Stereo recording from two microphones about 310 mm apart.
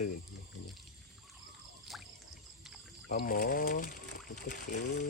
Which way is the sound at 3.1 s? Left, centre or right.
Left.